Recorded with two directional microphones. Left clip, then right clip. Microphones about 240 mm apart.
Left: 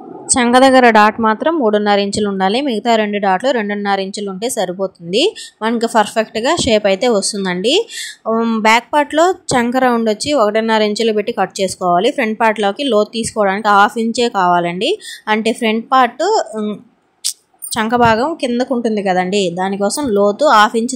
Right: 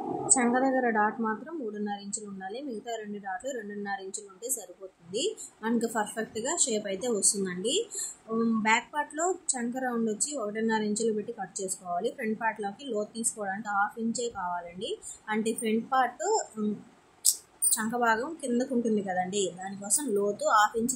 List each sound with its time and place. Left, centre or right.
0.3 s speech: left